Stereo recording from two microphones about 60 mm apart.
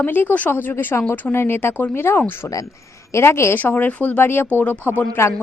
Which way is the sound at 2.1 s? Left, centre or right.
Left.